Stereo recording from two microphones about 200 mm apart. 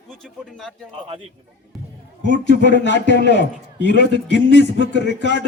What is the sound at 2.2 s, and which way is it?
A man's voice, 60° left (ahead or behind).